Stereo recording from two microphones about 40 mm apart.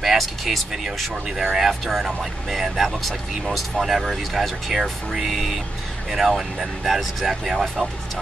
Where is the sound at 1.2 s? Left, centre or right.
Centre.